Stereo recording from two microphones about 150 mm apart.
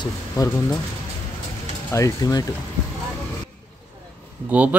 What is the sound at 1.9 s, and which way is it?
Speech, 20° left (ahead or behind).